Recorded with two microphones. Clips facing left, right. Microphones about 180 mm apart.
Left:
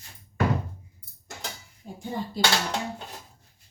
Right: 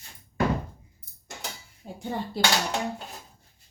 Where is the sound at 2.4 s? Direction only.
65° right (ahead or behind).